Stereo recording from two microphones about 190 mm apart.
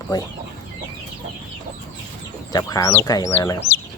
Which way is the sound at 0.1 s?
20° left (ahead or behind).